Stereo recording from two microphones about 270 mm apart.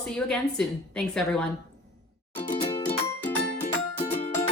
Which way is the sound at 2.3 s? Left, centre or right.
Left.